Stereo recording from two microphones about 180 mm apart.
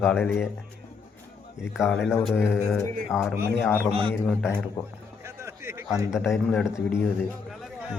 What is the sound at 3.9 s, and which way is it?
Speech, 30° right (ahead or behind).